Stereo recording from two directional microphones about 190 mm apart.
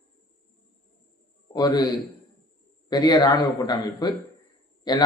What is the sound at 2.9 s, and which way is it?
A man's voice, 20° left (ahead or behind).